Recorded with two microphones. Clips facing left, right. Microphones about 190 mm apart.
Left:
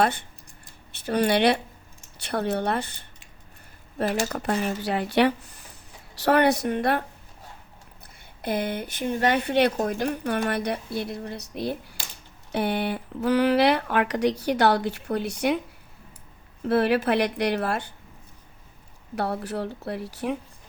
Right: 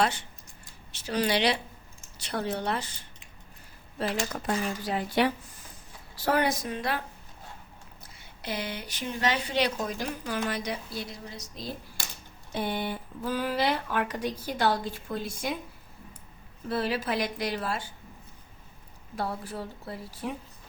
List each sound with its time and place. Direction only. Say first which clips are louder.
0.0 s speech: left 4 dB; 55° left (ahead or behind)
4.3 s speech: left 4 dB; 65° left (ahead or behind)
8.4 s speech: left 7 dB; 55° left (ahead or behind); by 15.6 s 70° left (ahead or behind)
16.6 s speech: left 8 dB; 65° left (ahead or behind)
19.1 s speech: left 6 dB; 70° left (ahead or behind)